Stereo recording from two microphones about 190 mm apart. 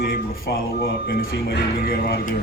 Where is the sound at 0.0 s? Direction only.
50° left (ahead or behind).